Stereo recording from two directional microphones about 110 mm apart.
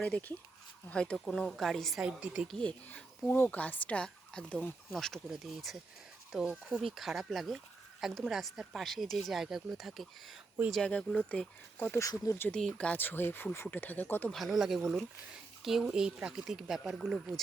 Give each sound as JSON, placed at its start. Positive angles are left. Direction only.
{"t": 0.0, "sound": "speech", "side_deg": 15}
{"t": 2.5, "sound": "speech", "side_deg": 10}
{"t": 11.9, "sound": "speech", "side_deg": 30}
{"t": 12.5, "sound": "speech", "side_deg": 5}
{"t": 14.3, "sound": "speech", "side_deg": 0}